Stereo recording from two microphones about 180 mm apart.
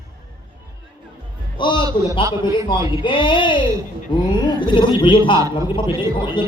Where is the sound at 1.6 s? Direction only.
25° left (ahead or behind).